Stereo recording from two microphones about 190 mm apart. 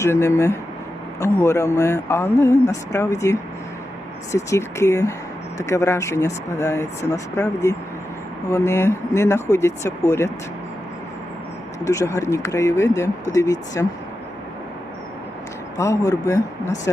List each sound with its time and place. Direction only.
0.0 s speech: 15° left (ahead or behind)
11.9 s speech: 15° left (ahead or behind)
15.8 s speech: 15° left (ahead or behind)